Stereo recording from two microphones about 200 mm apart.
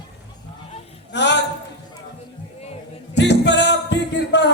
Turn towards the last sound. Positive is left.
turn(degrees=60)  # may be behind; listen again after turning